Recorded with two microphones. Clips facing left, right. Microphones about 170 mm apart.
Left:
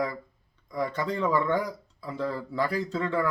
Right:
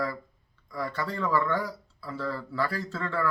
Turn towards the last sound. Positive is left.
turn(degrees=15)  # may be behind; listen again after turning